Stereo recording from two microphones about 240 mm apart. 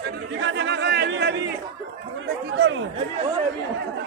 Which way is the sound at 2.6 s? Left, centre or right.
Right.